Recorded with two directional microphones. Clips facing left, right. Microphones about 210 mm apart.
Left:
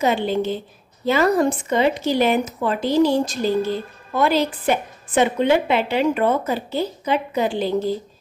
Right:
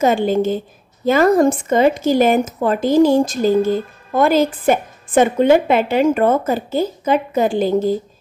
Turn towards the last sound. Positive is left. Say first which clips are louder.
# right 5 dB
turn(degrees=-45)  # may be behind; listen again after turning